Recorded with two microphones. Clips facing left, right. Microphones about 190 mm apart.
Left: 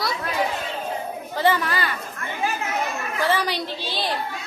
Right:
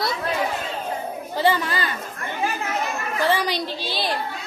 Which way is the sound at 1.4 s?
15° right (ahead or behind).